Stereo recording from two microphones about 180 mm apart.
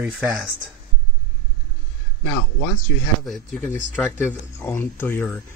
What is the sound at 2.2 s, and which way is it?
Speech, 15° left (ahead or behind).